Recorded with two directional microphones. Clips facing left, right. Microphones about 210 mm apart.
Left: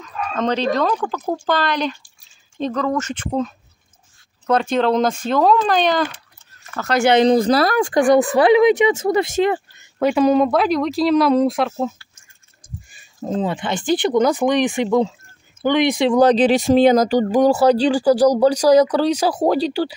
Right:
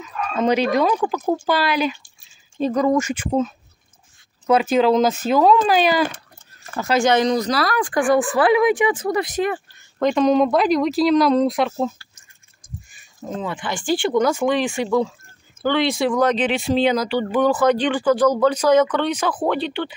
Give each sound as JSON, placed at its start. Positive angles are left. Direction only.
{"t": 0.0, "sound": "speech", "side_deg": -10}
{"t": 6.7, "sound": "speech", "side_deg": -30}
{"t": 7.2, "sound": "speech", "side_deg": 30}
{"t": 9.9, "sound": "speech", "side_deg": 5}
{"t": 13.2, "sound": "speech", "side_deg": 30}
{"t": 16.2, "sound": "speech", "side_deg": 35}